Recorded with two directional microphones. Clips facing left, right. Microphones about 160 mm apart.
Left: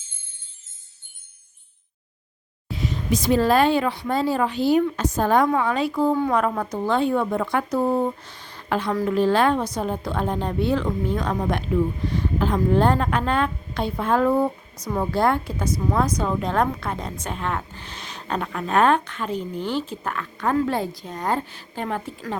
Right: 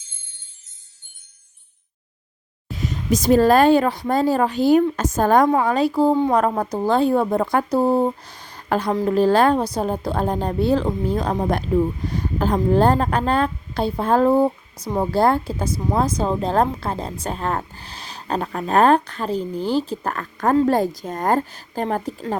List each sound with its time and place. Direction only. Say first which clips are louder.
2.6 s speech: right 2 dB; 45° right (ahead or behind)